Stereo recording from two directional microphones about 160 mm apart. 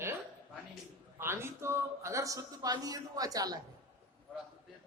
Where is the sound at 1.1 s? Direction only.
15° right (ahead or behind).